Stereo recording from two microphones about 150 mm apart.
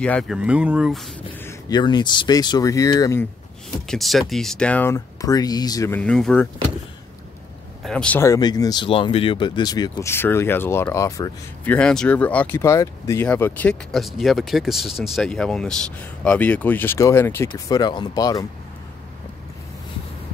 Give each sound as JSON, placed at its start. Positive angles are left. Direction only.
{"t": 0.0, "sound": "speech", "side_deg": 5}
{"t": 0.4, "sound": "speech", "side_deg": -10}
{"t": 1.7, "sound": "speech", "side_deg": 30}
{"t": 3.8, "sound": "speech", "side_deg": 0}
{"t": 4.9, "sound": "speech", "side_deg": 25}
{"t": 5.9, "sound": "speech", "side_deg": 5}
{"t": 7.8, "sound": "speech", "side_deg": 5}
{"t": 8.2, "sound": "speech", "side_deg": 25}
{"t": 11.6, "sound": "speech", "side_deg": 10}
{"t": 17.5, "sound": "speech", "side_deg": 25}